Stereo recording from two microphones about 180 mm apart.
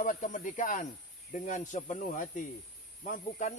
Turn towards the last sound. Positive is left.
turn(degrees=45)  # may be behind; listen again after turning